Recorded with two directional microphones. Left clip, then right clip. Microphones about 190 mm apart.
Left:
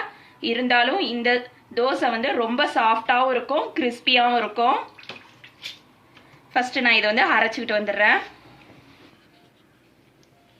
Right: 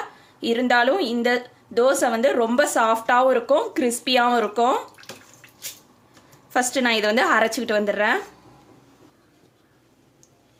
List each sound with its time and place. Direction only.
0.3 s a woman's voice: 60° right (ahead or behind)
6.5 s a woman's voice: 55° right (ahead or behind)